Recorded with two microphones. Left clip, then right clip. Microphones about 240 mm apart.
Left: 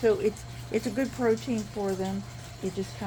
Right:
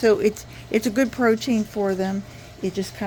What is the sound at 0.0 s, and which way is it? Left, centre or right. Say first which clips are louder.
Speech: right 6 dB; right.